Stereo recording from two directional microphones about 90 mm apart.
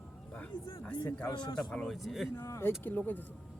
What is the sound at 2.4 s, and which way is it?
Speech, 30° left (ahead or behind).